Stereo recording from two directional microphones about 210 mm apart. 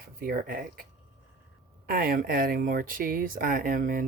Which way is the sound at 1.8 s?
45° right (ahead or behind).